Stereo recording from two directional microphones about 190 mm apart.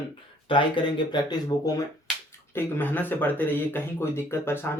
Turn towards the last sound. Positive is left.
turn(degrees=10)  # may be behind; listen again after turning